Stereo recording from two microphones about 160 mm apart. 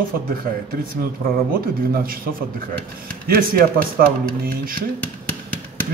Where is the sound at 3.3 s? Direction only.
65° right (ahead or behind).